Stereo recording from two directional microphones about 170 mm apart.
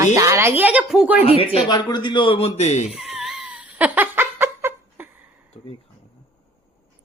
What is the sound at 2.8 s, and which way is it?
Giggle, centre (ahead or behind).